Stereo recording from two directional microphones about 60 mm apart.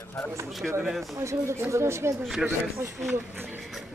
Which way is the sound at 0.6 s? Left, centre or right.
Centre.